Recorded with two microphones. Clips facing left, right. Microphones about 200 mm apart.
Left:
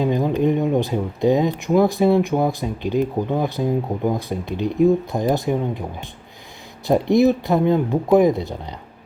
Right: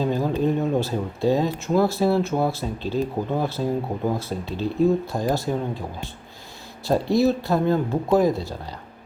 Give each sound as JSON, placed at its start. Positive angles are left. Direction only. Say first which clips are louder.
{"t": 0.0, "sound": "speech", "louder": "left 3 dB", "side_deg": 15}